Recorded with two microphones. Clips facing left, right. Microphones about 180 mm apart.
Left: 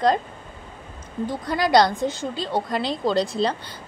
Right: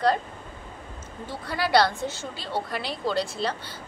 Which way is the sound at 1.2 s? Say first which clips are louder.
Left 6 dB; 15° left (ahead or behind).